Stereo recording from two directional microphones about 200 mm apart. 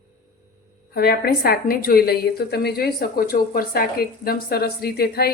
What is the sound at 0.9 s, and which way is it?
A woman's voice, 50° left (ahead or behind).